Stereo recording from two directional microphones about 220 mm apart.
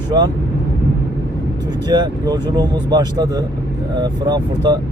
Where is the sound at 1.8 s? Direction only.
20° right (ahead or behind).